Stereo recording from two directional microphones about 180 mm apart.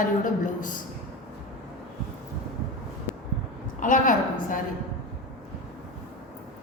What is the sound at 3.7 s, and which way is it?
Speech, 45° left (ahead or behind).